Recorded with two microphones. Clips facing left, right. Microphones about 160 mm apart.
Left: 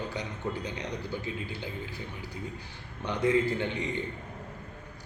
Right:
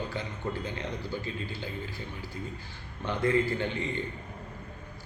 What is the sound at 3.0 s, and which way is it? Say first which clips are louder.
A man's voice: left 1 dB; 15° left (ahead or behind).